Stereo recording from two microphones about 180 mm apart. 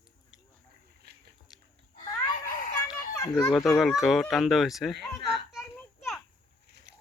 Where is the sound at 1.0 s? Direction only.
65° right (ahead or behind).